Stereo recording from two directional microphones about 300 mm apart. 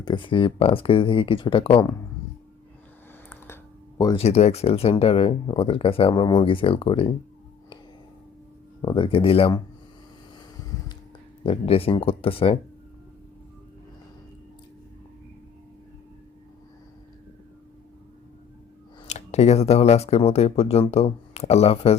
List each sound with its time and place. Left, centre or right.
0.0 s speech: centre
3.2 s speech: centre
8.8 s speech: centre
11.4 s speech: centre
19.0 s speech: left